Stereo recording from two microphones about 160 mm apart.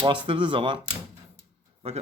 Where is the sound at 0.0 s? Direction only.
30° right (ahead or behind).